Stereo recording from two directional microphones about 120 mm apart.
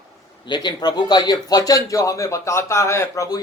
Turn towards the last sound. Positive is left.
turn(degrees=25)  # may be behind; listen again after turning